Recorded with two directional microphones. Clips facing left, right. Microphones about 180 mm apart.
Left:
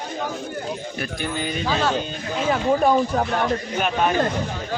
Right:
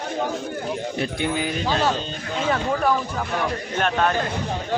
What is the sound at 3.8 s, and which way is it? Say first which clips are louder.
Speech: right 2 dB; 5° left (ahead or behind).